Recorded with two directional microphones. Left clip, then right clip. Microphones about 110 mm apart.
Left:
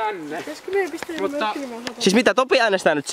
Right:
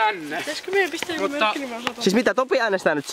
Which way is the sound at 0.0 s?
40° right (ahead or behind).